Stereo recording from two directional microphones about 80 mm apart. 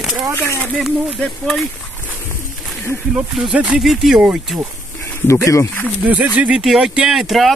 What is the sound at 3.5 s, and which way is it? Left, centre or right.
Speech, centre.